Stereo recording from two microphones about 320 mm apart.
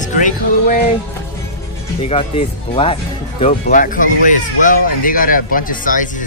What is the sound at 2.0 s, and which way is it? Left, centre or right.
Speech, centre.